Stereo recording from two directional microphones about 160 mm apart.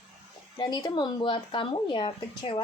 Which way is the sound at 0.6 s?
25° left (ahead or behind).